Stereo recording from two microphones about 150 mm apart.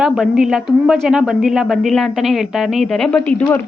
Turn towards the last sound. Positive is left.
turn(degrees=10)  # may be behind; listen again after turning